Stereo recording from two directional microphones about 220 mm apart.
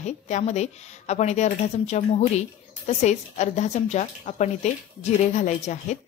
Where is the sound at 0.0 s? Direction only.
30° left (ahead or behind).